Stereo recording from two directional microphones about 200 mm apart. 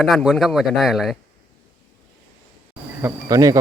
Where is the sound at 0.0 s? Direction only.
Centre (ahead or behind).